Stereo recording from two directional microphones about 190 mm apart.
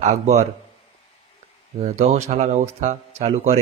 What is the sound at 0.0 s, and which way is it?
Speech, 40° right (ahead or behind).